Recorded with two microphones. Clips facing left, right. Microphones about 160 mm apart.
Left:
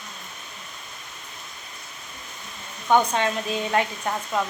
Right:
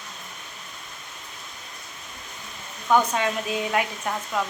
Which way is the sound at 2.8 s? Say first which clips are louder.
Left 1 dB; 20° left (ahead or behind).